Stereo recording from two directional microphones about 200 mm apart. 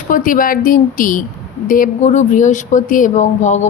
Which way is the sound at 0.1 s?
40° left (ahead or behind).